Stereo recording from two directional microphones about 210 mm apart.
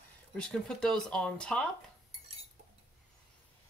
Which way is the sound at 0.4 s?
5° left (ahead or behind).